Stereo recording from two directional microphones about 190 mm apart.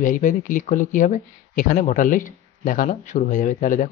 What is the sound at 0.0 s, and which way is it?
Speech, 40° left (ahead or behind).